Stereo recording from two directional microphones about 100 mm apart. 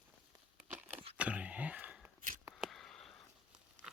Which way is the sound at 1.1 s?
10° right (ahead or behind).